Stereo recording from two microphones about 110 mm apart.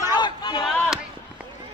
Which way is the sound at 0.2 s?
45° left (ahead or behind).